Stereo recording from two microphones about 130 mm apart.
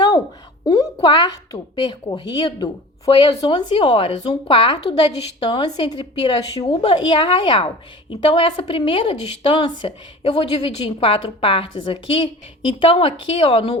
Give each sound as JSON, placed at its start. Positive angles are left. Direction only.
{"t": 0.6, "sound": "a woman's voice", "side_deg": 30}